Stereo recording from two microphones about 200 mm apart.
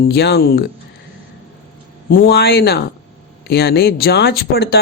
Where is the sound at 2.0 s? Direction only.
45° left (ahead or behind).